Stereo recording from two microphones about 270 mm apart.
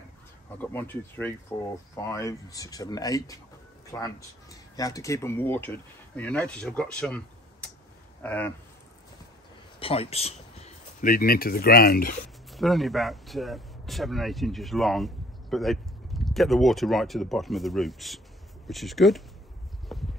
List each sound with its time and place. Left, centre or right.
0.6 s speech: centre
9.8 s speech: left
12.5 s speech: centre
19.9 s a sound: centre